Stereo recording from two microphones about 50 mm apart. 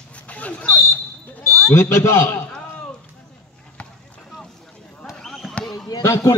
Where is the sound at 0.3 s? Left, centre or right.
Left.